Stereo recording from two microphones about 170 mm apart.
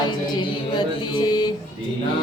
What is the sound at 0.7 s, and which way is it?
Mantra, 25° left (ahead or behind).